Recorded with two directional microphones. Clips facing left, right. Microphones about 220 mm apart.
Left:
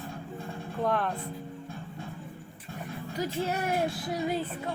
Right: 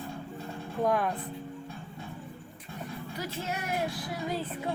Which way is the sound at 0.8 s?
10° right (ahead or behind).